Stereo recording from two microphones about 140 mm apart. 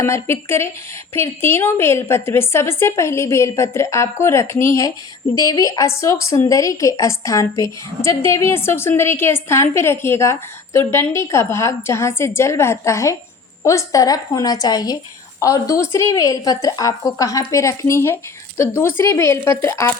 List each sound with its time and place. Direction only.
0.0 s a woman's voice: 20° left (ahead or behind)